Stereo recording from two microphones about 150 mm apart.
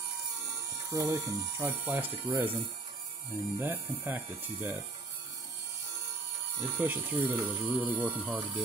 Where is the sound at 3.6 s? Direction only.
15° right (ahead or behind).